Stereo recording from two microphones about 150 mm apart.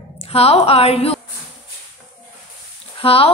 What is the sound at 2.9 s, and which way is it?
Speech, 40° left (ahead or behind).